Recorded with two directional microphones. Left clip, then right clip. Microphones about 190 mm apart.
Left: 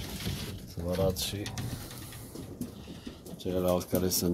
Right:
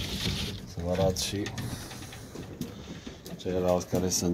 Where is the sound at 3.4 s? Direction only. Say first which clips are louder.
Right 2 dB; 10° left (ahead or behind).